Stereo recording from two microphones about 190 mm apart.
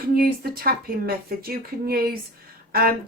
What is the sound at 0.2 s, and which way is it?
A woman's voice, 50° right (ahead or behind).